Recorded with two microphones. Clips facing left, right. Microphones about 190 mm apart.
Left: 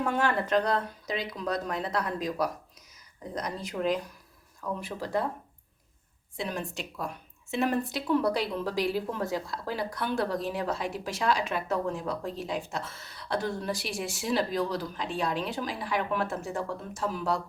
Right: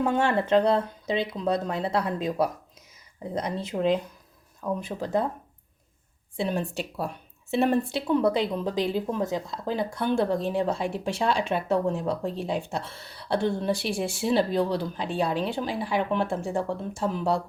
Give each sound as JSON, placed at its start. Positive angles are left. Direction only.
{"t": 0.0, "sound": "speech", "side_deg": -25}
{"t": 6.3, "sound": "a woman's voice", "side_deg": -30}